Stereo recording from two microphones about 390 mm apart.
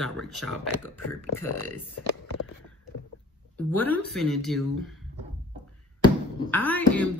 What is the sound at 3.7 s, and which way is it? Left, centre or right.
Speech, centre.